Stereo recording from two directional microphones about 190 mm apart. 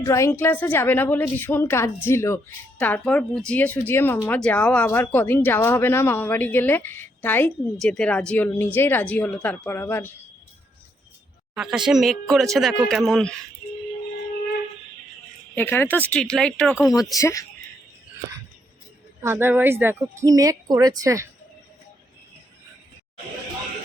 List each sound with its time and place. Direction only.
0.0 s a woman's voice: 15° left (ahead or behind)
11.5 s speech: 5° right (ahead or behind)
15.5 s a woman's voice: 10° left (ahead or behind)
17.2 s a woman's voice: 15° left (ahead or behind)
19.2 s speech: 10° right (ahead or behind)